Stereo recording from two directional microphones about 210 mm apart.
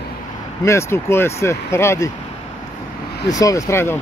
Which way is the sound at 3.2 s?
15° left (ahead or behind).